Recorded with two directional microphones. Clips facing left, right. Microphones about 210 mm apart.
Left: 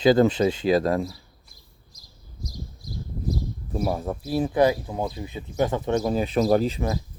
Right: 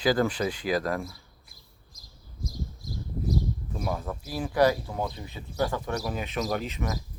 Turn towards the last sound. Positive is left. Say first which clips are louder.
# left 9 dB
turn(degrees=30)  # may be behind; listen again after turning